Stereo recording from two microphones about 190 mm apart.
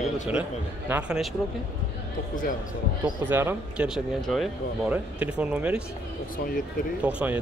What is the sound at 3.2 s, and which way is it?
Speech, 10° right (ahead or behind).